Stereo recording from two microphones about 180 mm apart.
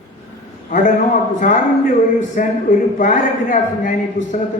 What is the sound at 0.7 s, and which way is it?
A man's voice, 45° left (ahead or behind).